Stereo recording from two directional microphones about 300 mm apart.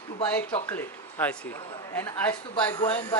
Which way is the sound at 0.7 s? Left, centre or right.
Centre.